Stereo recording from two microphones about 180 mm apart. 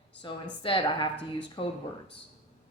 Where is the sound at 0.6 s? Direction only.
30° left (ahead or behind).